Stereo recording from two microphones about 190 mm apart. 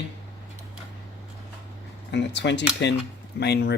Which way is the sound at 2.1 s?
65° left (ahead or behind).